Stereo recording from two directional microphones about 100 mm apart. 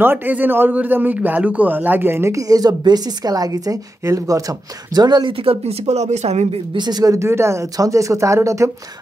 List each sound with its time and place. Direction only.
0.0 s a man's voice: 20° right (ahead or behind)
4.9 s speech: 45° right (ahead or behind)
5.4 s speech: 80° right
6.8 s speech: 40° right (ahead or behind)
7.2 s speech: 25° right (ahead or behind)